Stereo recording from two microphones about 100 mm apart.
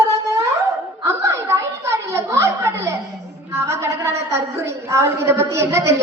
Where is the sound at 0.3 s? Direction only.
30° right (ahead or behind).